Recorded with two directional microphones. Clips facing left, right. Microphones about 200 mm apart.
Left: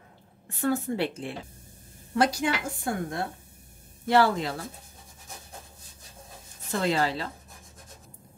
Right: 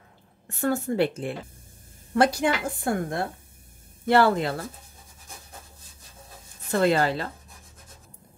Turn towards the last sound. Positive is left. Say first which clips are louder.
# right 4 dB
turn(degrees=-55)  # may be behind; listen again after turning